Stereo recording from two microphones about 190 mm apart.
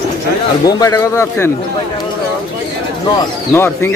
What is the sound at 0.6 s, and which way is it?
Speech, 20° left (ahead or behind).